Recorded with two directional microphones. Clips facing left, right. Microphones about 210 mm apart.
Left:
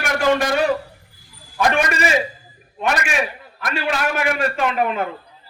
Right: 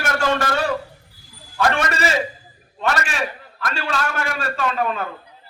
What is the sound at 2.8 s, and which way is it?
A man's voice, 15° left (ahead or behind).